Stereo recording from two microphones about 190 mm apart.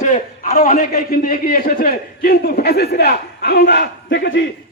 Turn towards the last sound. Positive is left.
turn(degrees=65)  # may be behind; listen again after turning